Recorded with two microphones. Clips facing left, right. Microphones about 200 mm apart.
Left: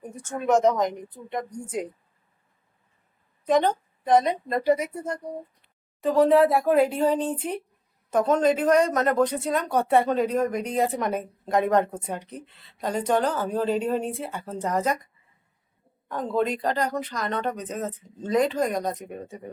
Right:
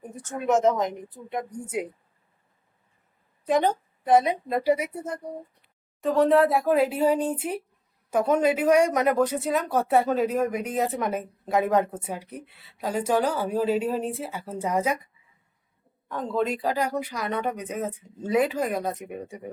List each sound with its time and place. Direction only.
0.4 s speech: centre (ahead or behind)
3.4 s speech: 10° right (ahead or behind)
16.1 s speech: centre (ahead or behind)